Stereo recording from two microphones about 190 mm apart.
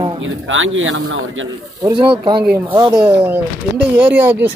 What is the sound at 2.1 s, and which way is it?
Speech, 25° right (ahead or behind).